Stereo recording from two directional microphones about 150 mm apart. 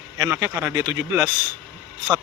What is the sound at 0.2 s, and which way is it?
Speech, 20° right (ahead or behind).